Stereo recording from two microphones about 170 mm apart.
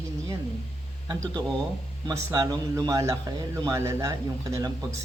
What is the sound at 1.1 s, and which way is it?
Speech, 20° right (ahead or behind).